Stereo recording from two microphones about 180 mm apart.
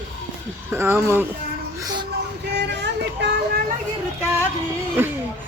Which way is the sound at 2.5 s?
70° right (ahead or behind).